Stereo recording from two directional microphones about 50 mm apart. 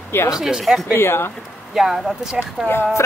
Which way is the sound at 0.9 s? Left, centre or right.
Left.